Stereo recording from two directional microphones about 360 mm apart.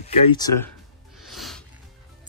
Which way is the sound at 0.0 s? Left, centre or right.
Centre.